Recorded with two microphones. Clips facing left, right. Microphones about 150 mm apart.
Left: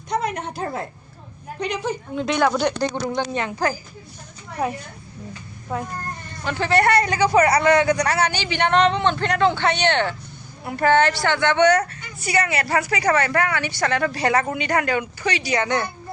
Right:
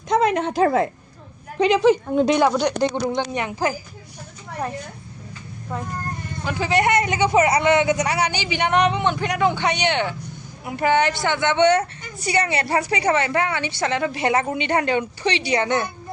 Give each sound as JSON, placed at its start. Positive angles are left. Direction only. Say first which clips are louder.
{"t": 0.1, "sound": "a woman's voice", "louder": "right 6 dB", "side_deg": -90}
{"t": 2.1, "sound": "speech", "louder": "right 6 dB", "side_deg": -35}
{"t": 2.4, "sound": "a man's voice", "louder": "right 1 dB", "side_deg": -10}
{"t": 4.6, "sound": "a woman's voice", "louder": "left 4 dB", "side_deg": 5}
{"t": 6.4, "sound": "a man's voice", "louder": "left 1 dB", "side_deg": -10}